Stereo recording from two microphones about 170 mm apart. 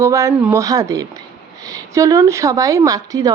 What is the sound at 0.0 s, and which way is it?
Speech, 15° right (ahead or behind).